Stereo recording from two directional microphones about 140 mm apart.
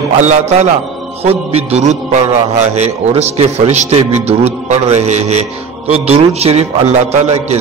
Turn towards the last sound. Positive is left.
turn(degrees=-50)  # may be behind; listen again after turning